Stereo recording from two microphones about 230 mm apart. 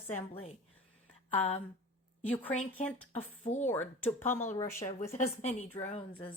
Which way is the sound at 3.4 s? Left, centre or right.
Left.